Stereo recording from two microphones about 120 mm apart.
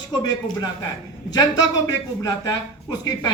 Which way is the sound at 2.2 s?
30° left (ahead or behind).